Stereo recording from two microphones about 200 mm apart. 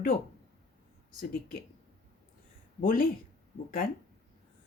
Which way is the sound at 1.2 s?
45° left (ahead or behind).